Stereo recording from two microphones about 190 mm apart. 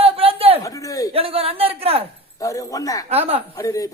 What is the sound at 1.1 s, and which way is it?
Speech, 30° right (ahead or behind).